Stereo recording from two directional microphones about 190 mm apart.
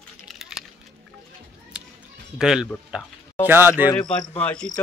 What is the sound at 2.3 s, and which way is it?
Speech, 5° right (ahead or behind).